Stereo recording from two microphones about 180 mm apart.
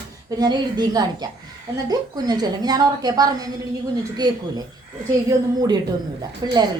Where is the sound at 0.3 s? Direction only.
20° right (ahead or behind).